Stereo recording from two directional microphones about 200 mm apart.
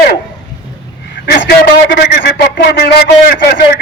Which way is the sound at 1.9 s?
50° left (ahead or behind).